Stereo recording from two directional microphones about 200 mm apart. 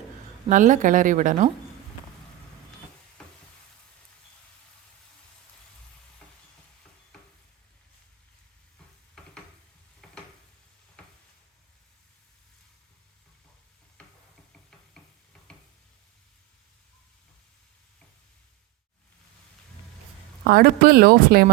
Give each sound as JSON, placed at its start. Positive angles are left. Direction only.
{"t": 0.4, "sound": "a woman's voice", "side_deg": -40}
{"t": 3.2, "sound": "frying", "side_deg": 5}
{"t": 11.0, "sound": "a sound", "side_deg": 5}
{"t": 15.5, "sound": "stir", "side_deg": 5}
{"t": 20.4, "sound": "speech", "side_deg": -50}